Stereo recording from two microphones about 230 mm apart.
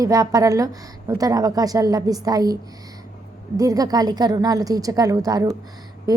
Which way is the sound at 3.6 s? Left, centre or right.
Centre.